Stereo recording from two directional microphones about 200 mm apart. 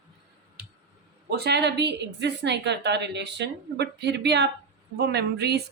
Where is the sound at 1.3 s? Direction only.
55° right (ahead or behind).